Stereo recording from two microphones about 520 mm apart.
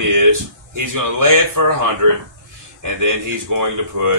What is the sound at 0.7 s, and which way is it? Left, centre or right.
Speech, right.